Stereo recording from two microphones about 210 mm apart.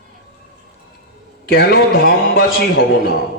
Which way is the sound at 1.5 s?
50° left (ahead or behind).